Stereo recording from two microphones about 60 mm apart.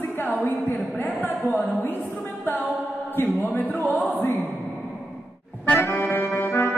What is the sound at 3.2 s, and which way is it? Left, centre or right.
Speech, left.